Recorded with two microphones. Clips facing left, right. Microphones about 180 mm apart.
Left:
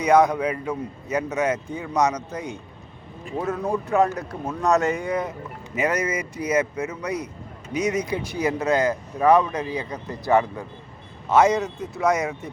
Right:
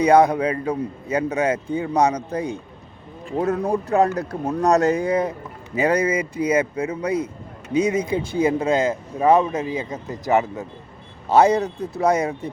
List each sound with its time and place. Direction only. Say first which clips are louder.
0.0 s a man's voice: right 3 dB; 30° right (ahead or behind)
11.3 s a man's voice: right 2 dB; 35° right (ahead or behind)